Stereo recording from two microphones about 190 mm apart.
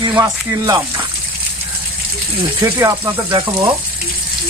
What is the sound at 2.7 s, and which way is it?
Speech, 15° right (ahead or behind).